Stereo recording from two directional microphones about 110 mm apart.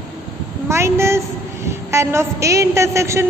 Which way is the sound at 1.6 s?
25° right (ahead or behind).